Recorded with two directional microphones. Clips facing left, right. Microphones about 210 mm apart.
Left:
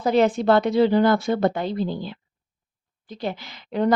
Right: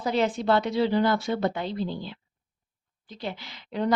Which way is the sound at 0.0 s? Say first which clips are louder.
Left 6 dB; 50° left (ahead or behind).